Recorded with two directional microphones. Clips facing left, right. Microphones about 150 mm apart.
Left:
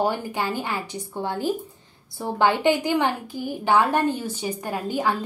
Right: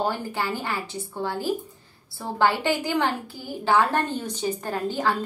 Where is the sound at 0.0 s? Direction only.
15° left (ahead or behind).